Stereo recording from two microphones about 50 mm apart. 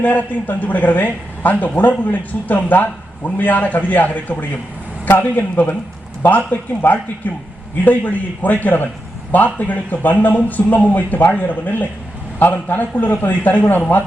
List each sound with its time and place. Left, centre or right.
0.0 s a man's voice: left